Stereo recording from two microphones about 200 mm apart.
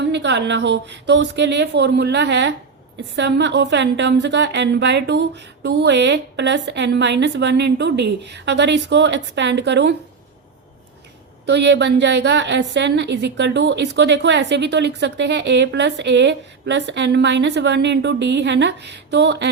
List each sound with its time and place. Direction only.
0.1 s a woman's voice: 60° right (ahead or behind)
11.4 s a woman's voice: 60° right (ahead or behind)